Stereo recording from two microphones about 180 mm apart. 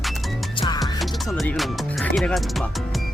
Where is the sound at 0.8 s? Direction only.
Centre (ahead or behind).